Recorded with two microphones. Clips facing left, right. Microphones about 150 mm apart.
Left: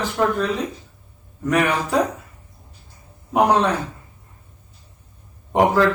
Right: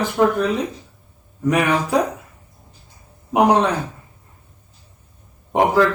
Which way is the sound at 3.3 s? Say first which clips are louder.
Right 2 dB; 15° right (ahead or behind).